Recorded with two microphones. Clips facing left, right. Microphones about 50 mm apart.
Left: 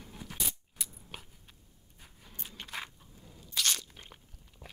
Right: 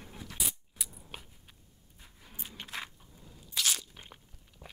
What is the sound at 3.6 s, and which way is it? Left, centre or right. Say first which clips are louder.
Crunch: even; centre.